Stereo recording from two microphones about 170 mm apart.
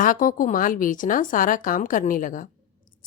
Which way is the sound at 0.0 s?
55° left (ahead or behind).